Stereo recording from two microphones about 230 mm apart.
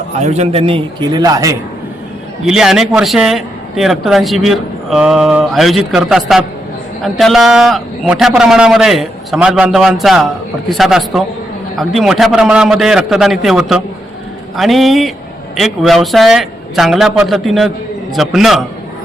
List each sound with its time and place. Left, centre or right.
0.2 s a man's voice: right
2.4 s a man's voice: centre